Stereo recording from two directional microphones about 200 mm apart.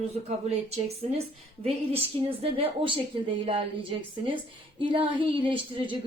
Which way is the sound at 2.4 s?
25° right (ahead or behind).